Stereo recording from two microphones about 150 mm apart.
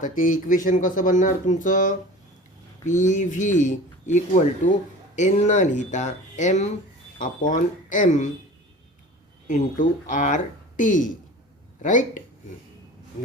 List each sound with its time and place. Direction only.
0.0 s speech: 60° left (ahead or behind)
9.5 s speech: 55° left (ahead or behind)